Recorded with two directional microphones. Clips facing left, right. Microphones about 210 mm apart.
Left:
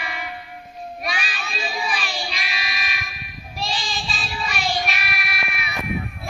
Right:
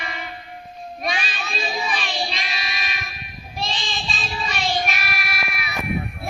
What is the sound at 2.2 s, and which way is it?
Child singing, 30° right (ahead or behind).